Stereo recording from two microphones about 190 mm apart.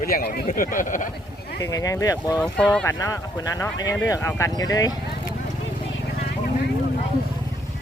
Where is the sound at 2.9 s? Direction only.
20° left (ahead or behind).